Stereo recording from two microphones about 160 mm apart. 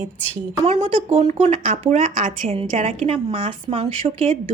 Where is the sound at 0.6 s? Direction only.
50° right (ahead or behind).